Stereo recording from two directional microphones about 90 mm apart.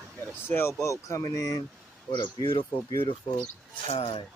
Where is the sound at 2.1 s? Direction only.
55° left (ahead or behind).